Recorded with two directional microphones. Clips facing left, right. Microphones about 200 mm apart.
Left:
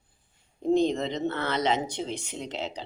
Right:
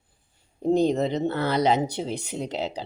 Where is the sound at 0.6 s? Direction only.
35° right (ahead or behind).